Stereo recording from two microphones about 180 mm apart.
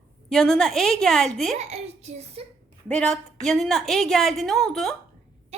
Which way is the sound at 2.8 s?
5° left (ahead or behind).